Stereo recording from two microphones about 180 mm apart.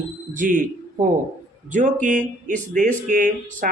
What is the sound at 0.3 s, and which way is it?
Speech, 45° right (ahead or behind).